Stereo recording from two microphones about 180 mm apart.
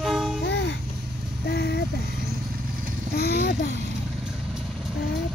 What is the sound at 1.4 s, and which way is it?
Vehicle, 65° left (ahead or behind).